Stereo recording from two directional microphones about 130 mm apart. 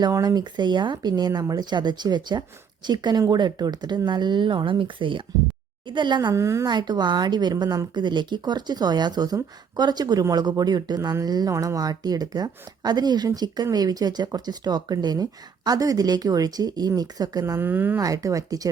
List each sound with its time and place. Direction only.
0.0 s a woman's voice: 25° right (ahead or behind)
6.3 s speech: 20° right (ahead or behind)
6.7 s a woman's voice: 35° right (ahead or behind); by 18.0 s 15° right (ahead or behind)
18.0 s speech: 25° right (ahead or behind)